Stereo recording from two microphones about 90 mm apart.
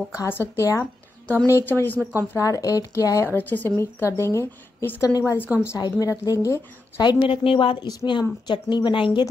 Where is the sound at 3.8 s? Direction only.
30° left (ahead or behind).